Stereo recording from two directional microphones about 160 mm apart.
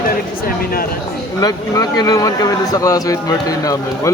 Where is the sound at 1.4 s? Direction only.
25° left (ahead or behind).